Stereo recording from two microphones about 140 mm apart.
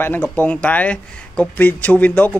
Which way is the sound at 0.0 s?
15° left (ahead or behind).